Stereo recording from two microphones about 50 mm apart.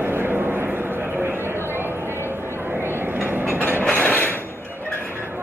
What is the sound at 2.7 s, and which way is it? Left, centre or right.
Train, right.